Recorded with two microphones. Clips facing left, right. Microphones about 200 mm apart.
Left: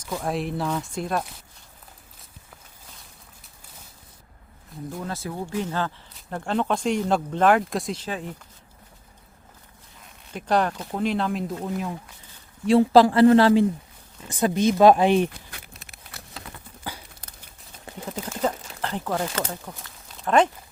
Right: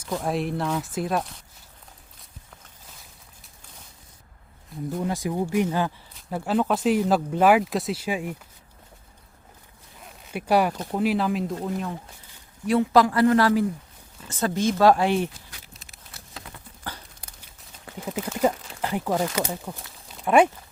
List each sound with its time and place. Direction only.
0.0 s speech: centre (ahead or behind)
4.9 s speech: 15° right (ahead or behind)
10.3 s speech: 10° right (ahead or behind)
12.6 s speech: 30° left (ahead or behind)
14.3 s speech: 15° left (ahead or behind)
15.3 s a sound: 60° left (ahead or behind)
18.1 s a sound: 10° right (ahead or behind)